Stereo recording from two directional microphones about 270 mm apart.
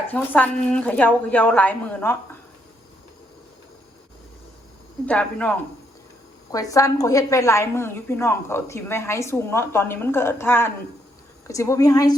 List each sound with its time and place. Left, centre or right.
0.1 s a woman's voice: centre
5.0 s a woman's voice: centre